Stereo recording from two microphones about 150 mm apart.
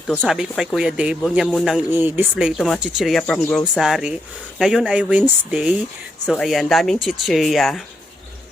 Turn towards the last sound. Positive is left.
turn(degrees=0)  # may be behind; listen again after turning